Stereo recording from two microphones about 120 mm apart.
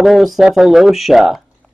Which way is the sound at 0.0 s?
Centre (ahead or behind).